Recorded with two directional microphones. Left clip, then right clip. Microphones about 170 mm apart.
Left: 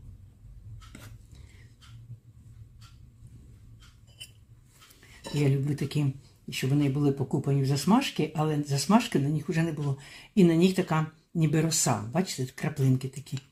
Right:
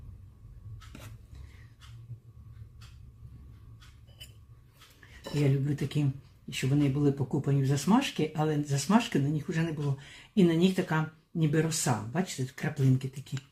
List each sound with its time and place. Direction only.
5.5 s speech: 25° left (ahead or behind)